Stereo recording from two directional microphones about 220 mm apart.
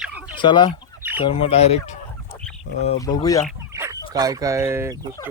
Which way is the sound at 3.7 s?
15° right (ahead or behind).